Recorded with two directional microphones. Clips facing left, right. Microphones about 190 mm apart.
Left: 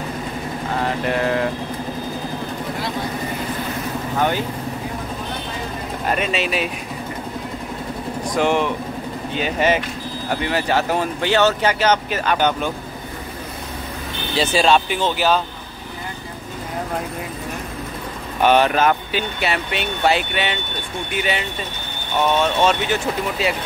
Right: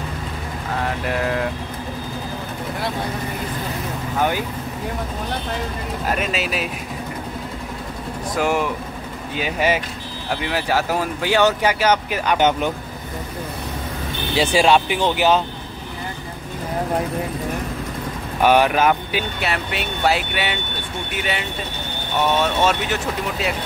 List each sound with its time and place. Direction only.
0.8 s speech: centre (ahead or behind)
6.0 s speech: 5° right (ahead or behind)
8.4 s speech: 5° right (ahead or behind)
14.3 s speech: 15° right (ahead or behind)
18.4 s speech: 10° right (ahead or behind)